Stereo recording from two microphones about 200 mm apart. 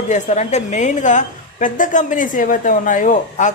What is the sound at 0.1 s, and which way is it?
A woman's voice, 35° left (ahead or behind).